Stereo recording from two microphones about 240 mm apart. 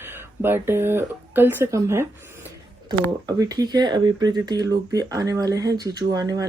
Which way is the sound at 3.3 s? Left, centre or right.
Centre.